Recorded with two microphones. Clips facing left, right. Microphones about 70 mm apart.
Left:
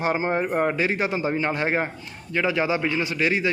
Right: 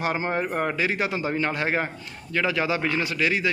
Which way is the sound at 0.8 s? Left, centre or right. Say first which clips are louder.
Left 2 dB; left.